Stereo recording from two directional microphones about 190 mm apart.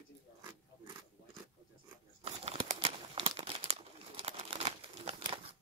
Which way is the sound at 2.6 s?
30° right (ahead or behind).